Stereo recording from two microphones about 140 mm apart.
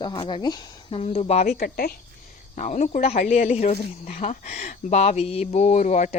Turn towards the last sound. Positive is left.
turn(degrees=60)  # may be behind; listen again after turning